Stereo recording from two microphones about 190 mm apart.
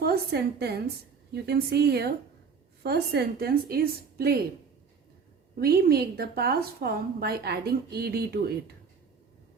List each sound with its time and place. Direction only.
0.0 s a woman's voice: 55° right (ahead or behind)
5.5 s a woman's voice: 55° right (ahead or behind)